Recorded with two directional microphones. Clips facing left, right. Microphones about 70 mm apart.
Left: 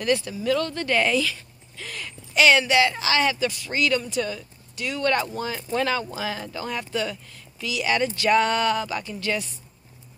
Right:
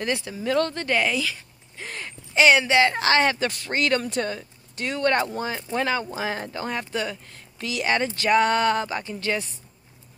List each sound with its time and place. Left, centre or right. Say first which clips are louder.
0.0 s speech: left 3 dB; right
0.6 s speech: right 3 dB; right
1.0 s speech: left 2 dB; centre
1.3 s a sound: even; right
2.9 s speech: right 2 dB; right
6.1 s speech: right 2 dB; right
7.5 s speech: even; right